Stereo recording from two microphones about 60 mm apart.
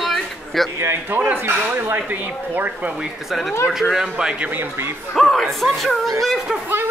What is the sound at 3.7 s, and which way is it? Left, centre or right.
Speech, centre.